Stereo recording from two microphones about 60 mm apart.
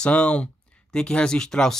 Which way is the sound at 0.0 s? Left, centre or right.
Centre.